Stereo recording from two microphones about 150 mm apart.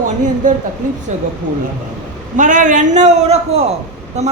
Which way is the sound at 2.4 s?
55° right (ahead or behind).